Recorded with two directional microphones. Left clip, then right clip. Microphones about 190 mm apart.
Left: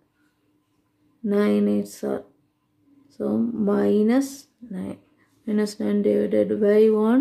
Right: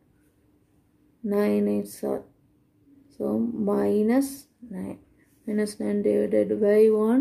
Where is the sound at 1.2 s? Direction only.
25° left (ahead or behind).